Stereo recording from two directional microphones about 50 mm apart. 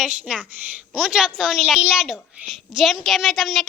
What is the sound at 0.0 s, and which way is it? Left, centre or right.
A woman's voice, centre.